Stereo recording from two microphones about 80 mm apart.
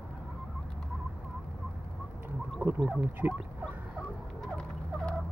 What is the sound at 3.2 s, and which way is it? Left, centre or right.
Fowl, right.